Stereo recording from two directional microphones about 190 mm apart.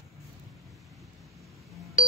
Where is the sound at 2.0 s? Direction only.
40° left (ahead or behind).